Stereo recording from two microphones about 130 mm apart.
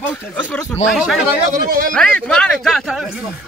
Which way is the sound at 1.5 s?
90° right.